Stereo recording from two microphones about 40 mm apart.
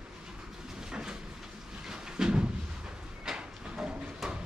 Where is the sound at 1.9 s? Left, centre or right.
Centre.